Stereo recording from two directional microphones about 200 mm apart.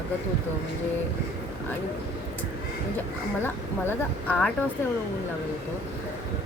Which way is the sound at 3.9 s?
5° left (ahead or behind).